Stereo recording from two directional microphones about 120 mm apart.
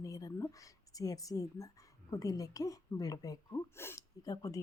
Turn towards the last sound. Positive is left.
turn(degrees=30)  # may be behind; listen again after turning